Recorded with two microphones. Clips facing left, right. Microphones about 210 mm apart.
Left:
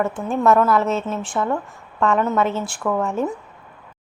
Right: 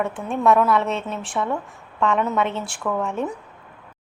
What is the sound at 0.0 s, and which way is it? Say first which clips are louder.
A woman's voice: left 2 dB; centre (ahead or behind).